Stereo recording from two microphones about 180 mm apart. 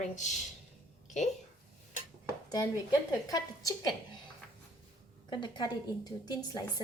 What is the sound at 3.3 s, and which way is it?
Speech, 20° left (ahead or behind).